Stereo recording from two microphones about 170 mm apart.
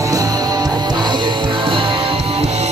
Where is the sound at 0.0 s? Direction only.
20° right (ahead or behind).